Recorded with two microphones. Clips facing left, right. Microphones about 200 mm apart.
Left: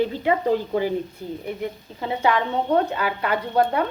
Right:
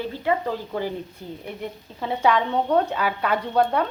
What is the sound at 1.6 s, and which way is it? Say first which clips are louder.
A woman's voice: left 2 dB; centre (ahead or behind).